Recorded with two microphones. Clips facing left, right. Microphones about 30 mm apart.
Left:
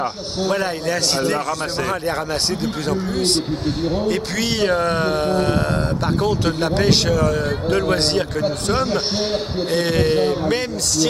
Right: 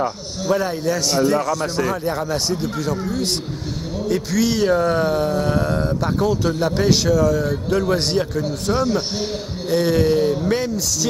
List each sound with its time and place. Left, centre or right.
0.0 s speech: left